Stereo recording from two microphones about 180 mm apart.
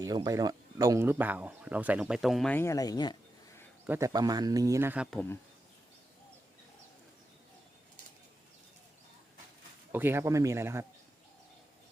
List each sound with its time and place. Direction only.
0.0 s speech: 20° right (ahead or behind); by 2.6 s centre (ahead or behind)
2.6 s speech: 15° left (ahead or behind)
3.8 s speech: 15° right (ahead or behind)
9.9 s speech: 10° right (ahead or behind)